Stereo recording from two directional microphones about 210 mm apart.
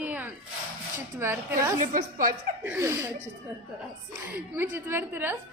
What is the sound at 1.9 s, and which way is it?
Speech, 40° right (ahead or behind).